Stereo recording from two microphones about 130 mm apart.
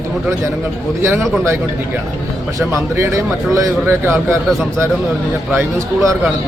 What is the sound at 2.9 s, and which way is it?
A man's voice, 25° right (ahead or behind).